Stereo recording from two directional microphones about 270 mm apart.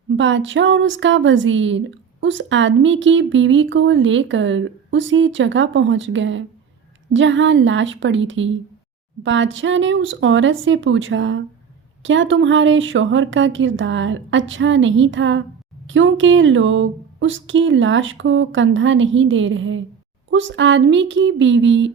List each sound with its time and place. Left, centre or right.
0.1 s speech: right